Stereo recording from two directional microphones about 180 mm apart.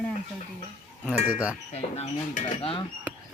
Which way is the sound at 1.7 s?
35° left (ahead or behind).